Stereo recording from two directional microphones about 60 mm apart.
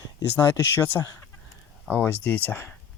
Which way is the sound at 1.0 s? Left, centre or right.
Left.